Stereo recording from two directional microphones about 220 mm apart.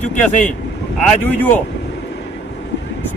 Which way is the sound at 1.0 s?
10° left (ahead or behind).